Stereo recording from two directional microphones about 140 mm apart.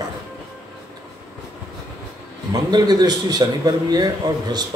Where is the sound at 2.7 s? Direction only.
30° right (ahead or behind).